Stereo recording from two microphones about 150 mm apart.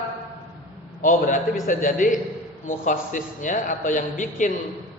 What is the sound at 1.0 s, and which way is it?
A man's voice, 60° left (ahead or behind).